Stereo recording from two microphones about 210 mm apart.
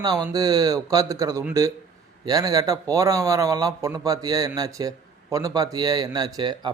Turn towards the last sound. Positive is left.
turn(degrees=-20)  # may be behind; listen again after turning